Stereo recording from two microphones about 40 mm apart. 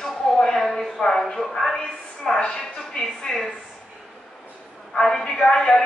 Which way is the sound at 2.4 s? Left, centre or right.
Centre.